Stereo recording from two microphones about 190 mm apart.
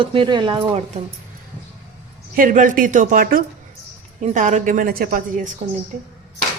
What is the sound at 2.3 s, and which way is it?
A woman's voice, 45° right (ahead or behind).